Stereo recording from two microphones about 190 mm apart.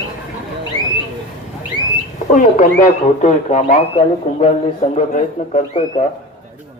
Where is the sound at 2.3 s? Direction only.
40° left (ahead or behind).